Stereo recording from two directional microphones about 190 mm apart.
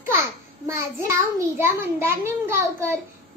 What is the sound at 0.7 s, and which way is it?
Child singing, 15° right (ahead or behind).